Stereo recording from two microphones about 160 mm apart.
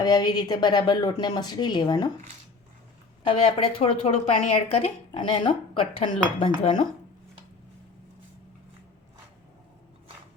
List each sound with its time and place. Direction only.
0.0 s a woman's voice: 25° left (ahead or behind)
3.2 s speech: 35° left (ahead or behind)